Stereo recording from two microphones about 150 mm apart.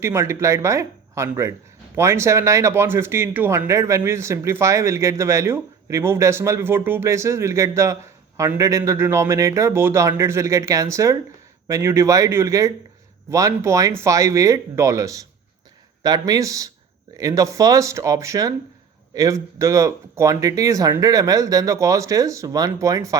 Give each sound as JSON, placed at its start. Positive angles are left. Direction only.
{"t": 0.0, "sound": "speech", "side_deg": -20}